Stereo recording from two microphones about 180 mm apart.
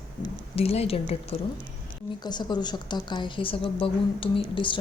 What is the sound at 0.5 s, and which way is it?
Speech, 35° left (ahead or behind).